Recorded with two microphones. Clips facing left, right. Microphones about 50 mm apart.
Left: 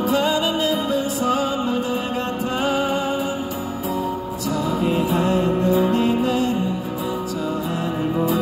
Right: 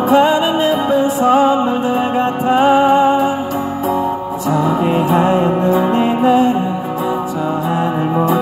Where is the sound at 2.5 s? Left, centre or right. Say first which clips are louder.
Right 12 dB; right.